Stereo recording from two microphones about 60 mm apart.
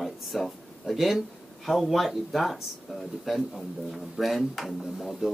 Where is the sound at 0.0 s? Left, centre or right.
Centre.